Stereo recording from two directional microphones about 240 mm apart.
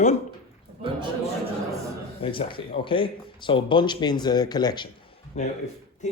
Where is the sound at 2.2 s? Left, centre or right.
Left.